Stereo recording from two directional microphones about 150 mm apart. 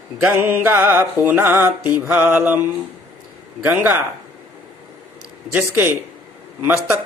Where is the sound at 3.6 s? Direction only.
10° right (ahead or behind).